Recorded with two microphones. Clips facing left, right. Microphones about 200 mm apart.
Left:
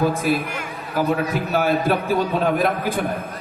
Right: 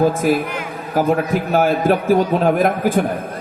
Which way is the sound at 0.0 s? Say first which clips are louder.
Right 4 dB; 45° right (ahead or behind).